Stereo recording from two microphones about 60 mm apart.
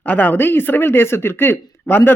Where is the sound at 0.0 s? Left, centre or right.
Left.